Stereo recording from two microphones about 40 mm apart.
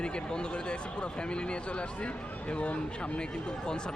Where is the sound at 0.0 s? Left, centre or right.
Left.